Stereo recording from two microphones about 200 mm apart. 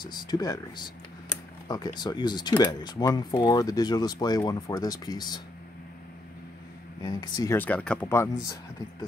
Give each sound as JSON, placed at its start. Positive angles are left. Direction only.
{"t": 0.0, "sound": "speech", "side_deg": 20}
{"t": 7.0, "sound": "speech", "side_deg": 20}
{"t": 7.5, "sound": "speech", "side_deg": 5}